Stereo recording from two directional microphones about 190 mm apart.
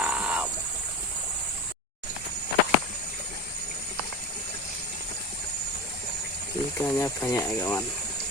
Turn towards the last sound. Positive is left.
turn(degrees=10)  # may be behind; listen again after turning